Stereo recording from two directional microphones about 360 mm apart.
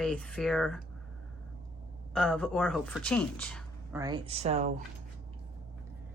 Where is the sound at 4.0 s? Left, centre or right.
Centre.